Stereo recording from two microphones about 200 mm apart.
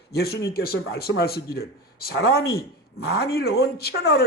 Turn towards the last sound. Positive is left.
turn(degrees=55)  # may be behind; listen again after turning